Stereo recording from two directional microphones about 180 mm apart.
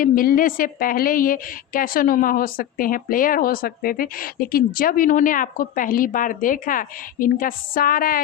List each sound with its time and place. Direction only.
0.0 s a woman's voice: 50° left (ahead or behind)